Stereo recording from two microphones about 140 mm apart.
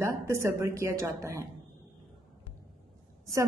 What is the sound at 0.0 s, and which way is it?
A woman's voice, 20° right (ahead or behind).